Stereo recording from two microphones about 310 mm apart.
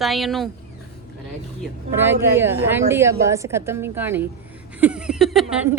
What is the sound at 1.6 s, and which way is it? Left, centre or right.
Speech, centre.